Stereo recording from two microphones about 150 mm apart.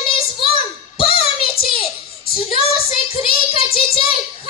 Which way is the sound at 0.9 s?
40° left (ahead or behind).